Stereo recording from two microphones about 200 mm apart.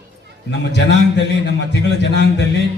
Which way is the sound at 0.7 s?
60° left (ahead or behind).